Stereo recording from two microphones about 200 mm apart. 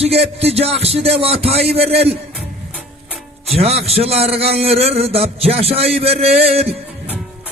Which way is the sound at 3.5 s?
30° right (ahead or behind).